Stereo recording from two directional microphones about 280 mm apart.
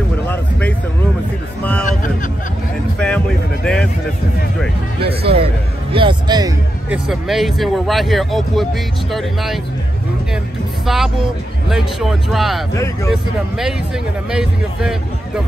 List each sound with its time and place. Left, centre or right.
0.3 s a sound: centre
3.0 s a sound: centre
5.0 s a man's voice: centre
7.1 s speech: centre
10.9 s speech: centre
12.7 s speech: centre
13.1 s speech: centre